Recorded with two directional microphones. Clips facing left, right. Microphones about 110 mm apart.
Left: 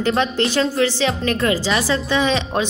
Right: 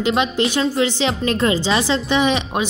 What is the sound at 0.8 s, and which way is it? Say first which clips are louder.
Music: even; 25° right (ahead or behind).